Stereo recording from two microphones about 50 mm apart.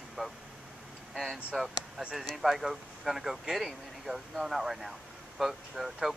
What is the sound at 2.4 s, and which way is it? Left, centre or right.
Speech, centre.